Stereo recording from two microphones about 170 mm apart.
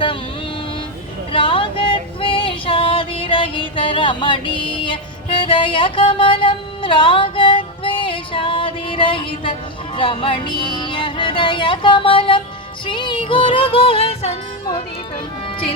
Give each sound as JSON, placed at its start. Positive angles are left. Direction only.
{"t": 1.3, "sound": "female singing", "side_deg": 30}
{"t": 12.8, "sound": "music", "side_deg": 30}